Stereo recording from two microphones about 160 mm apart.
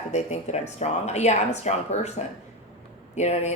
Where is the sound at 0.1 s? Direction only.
45° left (ahead or behind).